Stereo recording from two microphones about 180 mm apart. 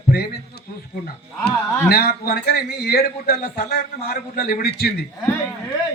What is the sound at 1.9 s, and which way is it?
A man's voice, 60° left (ahead or behind).